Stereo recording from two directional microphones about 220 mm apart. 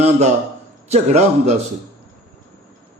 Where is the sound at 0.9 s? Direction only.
30° right (ahead or behind).